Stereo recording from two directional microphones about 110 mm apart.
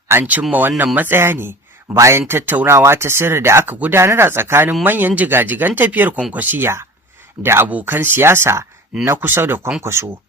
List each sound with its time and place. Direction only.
0.1 s speech: 15° right (ahead or behind)